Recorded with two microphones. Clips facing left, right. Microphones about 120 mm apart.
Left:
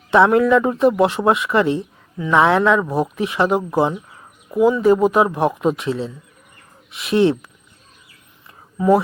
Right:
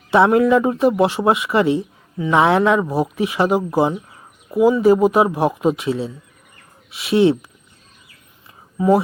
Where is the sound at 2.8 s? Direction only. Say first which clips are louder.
Right 1 dB; 5° right (ahead or behind).